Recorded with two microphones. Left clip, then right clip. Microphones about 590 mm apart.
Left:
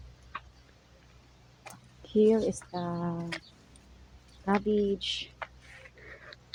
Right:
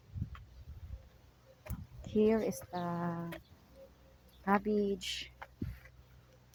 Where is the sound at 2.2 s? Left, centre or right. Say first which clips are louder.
Left 6 dB; right.